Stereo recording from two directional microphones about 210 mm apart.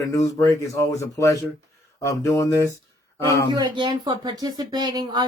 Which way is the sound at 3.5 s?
20° right (ahead or behind).